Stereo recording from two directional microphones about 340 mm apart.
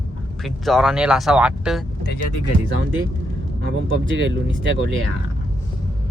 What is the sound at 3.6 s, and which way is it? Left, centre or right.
Speech, right.